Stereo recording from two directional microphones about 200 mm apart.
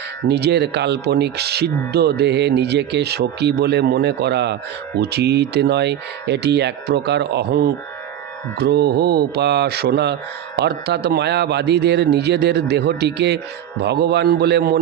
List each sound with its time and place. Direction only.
0.3 s speech: 55° right (ahead or behind)